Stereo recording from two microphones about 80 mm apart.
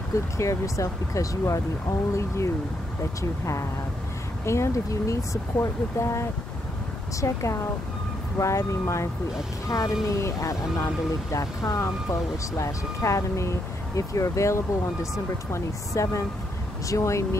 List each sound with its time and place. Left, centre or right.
0.4 s speech: left